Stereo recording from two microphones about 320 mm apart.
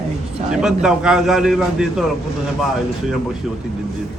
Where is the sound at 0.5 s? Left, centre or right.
Centre.